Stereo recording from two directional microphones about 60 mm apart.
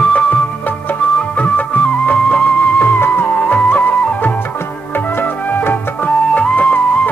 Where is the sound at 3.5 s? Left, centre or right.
Left.